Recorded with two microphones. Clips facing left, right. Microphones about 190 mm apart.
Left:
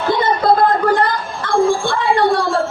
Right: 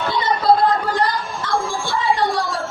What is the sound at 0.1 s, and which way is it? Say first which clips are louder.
Music: left 3 dB; 50° left (ahead or behind).